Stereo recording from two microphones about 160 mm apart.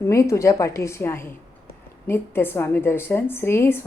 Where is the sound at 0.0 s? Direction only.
20° left (ahead or behind).